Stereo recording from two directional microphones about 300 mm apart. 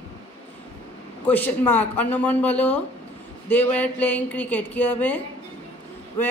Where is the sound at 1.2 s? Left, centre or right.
Centre.